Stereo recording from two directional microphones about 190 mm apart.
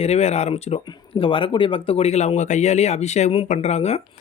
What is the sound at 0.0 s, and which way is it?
Speech, 35° left (ahead or behind).